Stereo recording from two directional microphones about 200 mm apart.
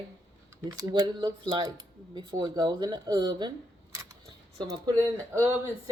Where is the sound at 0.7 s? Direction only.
20° right (ahead or behind).